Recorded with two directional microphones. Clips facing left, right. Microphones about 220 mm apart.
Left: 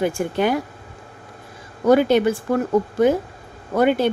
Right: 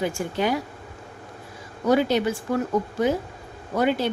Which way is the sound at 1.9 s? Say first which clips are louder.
Left 5 dB; 55° left (ahead or behind).